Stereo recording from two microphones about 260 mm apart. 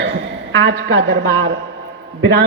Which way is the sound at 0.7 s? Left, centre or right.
Right.